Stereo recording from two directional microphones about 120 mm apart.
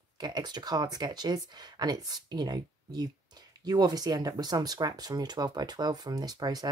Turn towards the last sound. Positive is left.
turn(degrees=-35)  # may be behind; listen again after turning